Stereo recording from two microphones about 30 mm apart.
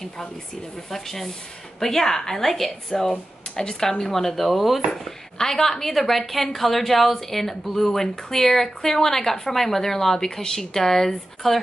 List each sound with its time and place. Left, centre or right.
0.8 s speech: centre
2.9 s speech: left
4.0 s speech: centre
4.9 s speech: centre